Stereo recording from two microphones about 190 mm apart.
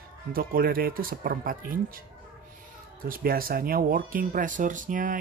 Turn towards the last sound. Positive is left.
turn(degrees=-45)  # may be behind; listen again after turning